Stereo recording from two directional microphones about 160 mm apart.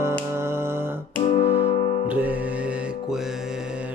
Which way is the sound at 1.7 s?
35° left (ahead or behind).